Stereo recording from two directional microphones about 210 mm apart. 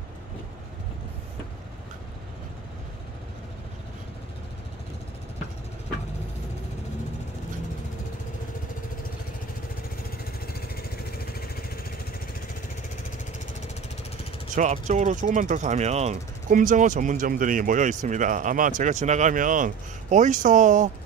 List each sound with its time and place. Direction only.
14.5 s speech: 35° right (ahead or behind)